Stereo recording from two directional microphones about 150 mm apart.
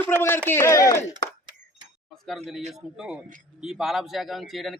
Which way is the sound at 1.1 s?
30° right (ahead or behind).